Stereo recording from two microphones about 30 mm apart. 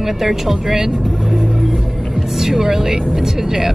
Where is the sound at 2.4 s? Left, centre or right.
Centre.